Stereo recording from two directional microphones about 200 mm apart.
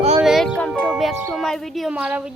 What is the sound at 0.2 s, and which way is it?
Music, centre (ahead or behind).